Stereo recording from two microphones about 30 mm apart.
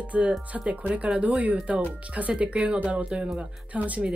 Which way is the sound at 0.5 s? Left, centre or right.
Centre.